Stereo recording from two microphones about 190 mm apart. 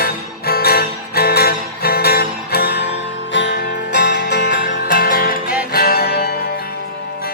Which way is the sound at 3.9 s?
65° left (ahead or behind).